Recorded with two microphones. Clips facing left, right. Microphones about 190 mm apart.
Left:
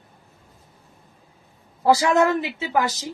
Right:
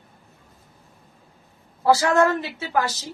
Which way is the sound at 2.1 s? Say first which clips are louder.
Even; 15° left (ahead or behind).